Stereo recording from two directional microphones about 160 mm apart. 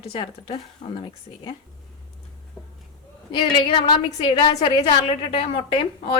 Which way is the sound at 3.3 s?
30° left (ahead or behind).